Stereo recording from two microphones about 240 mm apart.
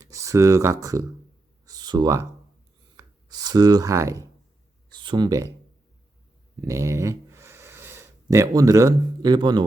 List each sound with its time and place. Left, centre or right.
0.0 s speech: centre
1.6 s a sound: centre
2.9 s speech: centre
6.6 s speech: centre